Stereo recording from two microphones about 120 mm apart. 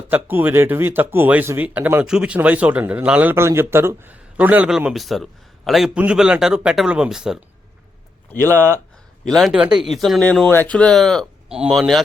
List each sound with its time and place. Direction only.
0.1 s speech: 15° right (ahead or behind)
8.3 s speech: 15° left (ahead or behind)
9.2 s speech: centre (ahead or behind)